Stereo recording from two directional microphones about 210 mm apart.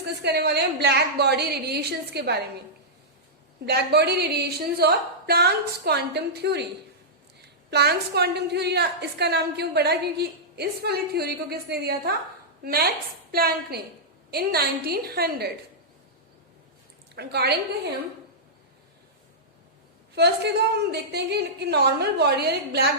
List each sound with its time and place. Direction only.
0.2 s a woman's voice: 50° right (ahead or behind)
3.7 s a woman's voice: 50° right (ahead or behind)
7.7 s a woman's voice: 50° right (ahead or behind)
17.2 s a woman's voice: 50° right (ahead or behind)
20.1 s a woman's voice: 50° right (ahead or behind)